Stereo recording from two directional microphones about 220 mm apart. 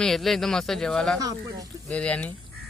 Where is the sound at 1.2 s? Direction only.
15° right (ahead or behind).